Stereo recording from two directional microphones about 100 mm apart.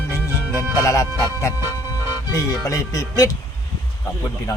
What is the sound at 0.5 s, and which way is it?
Speech, 30° left (ahead or behind).